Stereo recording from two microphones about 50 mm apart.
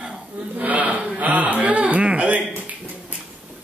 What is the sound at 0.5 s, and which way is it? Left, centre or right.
Speech, right.